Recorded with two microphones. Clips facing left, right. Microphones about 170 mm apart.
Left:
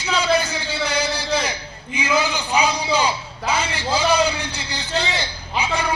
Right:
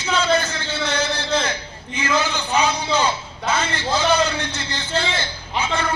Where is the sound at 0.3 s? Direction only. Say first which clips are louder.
Left 1 dB; 15° left (ahead or behind).